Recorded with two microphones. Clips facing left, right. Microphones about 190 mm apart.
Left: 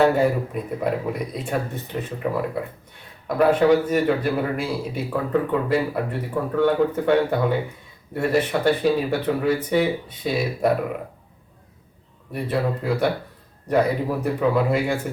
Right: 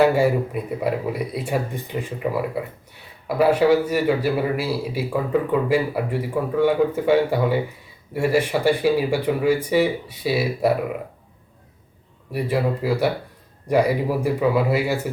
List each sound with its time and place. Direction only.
0.0 s a man's voice: 10° right (ahead or behind)
12.3 s a man's voice: 5° right (ahead or behind)